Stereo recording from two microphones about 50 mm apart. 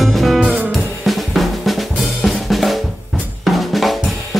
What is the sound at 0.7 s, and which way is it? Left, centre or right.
Drum kit, centre.